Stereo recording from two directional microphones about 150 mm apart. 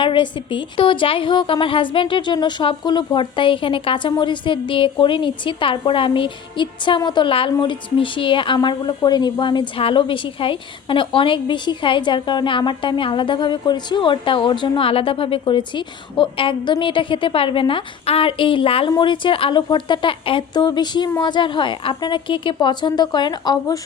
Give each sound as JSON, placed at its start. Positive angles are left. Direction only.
{"t": 0.0, "sound": "a woman's voice", "side_deg": 35}